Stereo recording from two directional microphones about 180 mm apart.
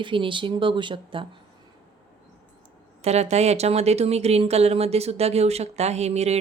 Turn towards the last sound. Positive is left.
turn(degrees=-35)  # may be behind; listen again after turning